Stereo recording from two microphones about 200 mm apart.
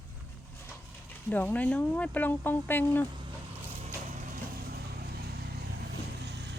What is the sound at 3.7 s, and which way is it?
Vehicle, 35° right (ahead or behind).